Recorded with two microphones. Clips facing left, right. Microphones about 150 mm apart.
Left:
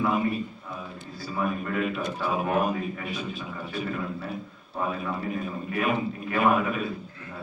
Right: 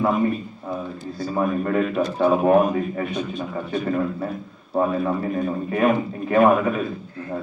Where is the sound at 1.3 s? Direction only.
40° right (ahead or behind).